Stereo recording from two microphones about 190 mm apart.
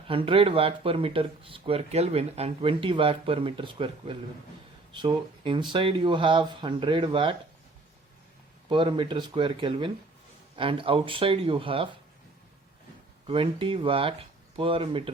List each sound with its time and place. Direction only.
0.1 s speech: 30° right (ahead or behind)
8.7 s speech: 25° right (ahead or behind)
13.2 s speech: 30° right (ahead or behind)